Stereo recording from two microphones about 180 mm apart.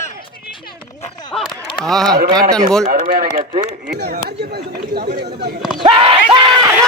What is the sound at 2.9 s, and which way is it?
Speech, 55° right (ahead or behind).